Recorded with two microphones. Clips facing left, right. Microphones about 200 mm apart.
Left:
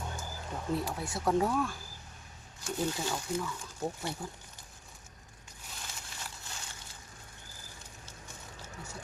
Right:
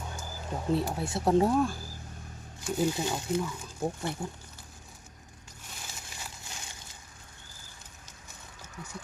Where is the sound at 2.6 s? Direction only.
5° right (ahead or behind).